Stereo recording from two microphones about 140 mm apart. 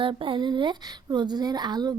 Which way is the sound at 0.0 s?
40° right (ahead or behind).